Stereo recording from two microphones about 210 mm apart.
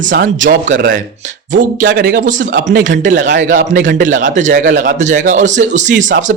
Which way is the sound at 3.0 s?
40° right (ahead or behind).